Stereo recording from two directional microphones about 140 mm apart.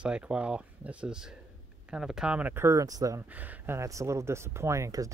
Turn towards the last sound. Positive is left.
turn(degrees=-25)  # may be behind; listen again after turning